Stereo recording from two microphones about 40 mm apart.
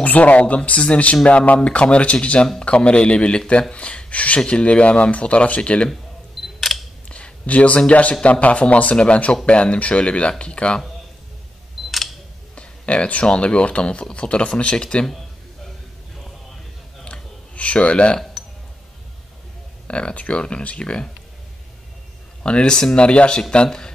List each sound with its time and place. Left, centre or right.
0.0 s speech: left
6.4 s camera: centre
7.1 s speech: left
11.8 s camera: centre
12.5 s speech: left
17.0 s a sound: left
19.9 s speech: left
22.4 s speech: left